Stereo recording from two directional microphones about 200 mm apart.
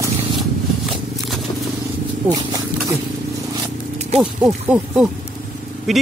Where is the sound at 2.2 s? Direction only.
15° right (ahead or behind).